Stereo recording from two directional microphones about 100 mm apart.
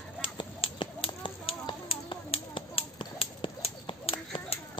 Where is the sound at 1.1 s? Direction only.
55° left (ahead or behind).